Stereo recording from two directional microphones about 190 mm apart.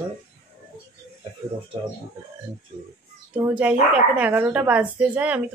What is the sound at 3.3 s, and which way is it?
Speech, 5° right (ahead or behind).